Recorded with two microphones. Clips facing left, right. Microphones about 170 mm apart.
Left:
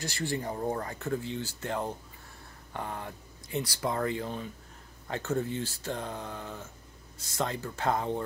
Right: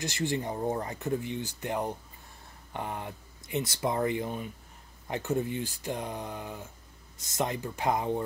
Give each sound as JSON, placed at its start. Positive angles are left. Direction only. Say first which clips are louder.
{"t": 0.0, "sound": "speech", "louder": "right 2 dB", "side_deg": -20}